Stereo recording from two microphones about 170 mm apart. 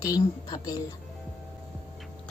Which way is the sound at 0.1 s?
20° left (ahead or behind).